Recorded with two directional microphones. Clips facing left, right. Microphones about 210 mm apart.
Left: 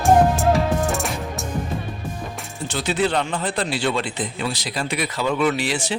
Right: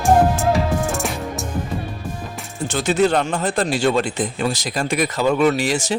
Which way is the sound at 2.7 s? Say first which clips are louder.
Right 4 dB; 45° right (ahead or behind).